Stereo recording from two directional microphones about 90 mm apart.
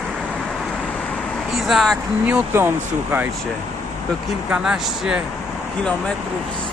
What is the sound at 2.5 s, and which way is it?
Speech, 25° right (ahead or behind).